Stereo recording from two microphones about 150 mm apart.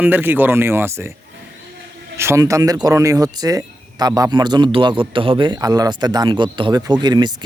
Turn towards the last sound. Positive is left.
turn(degrees=-30)  # may be behind; listen again after turning